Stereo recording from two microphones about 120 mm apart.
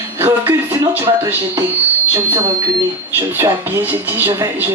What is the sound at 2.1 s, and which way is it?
Speech, 25° right (ahead or behind).